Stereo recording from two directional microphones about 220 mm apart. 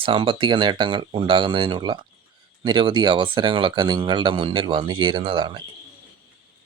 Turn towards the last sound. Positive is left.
turn(degrees=-20)  # may be behind; listen again after turning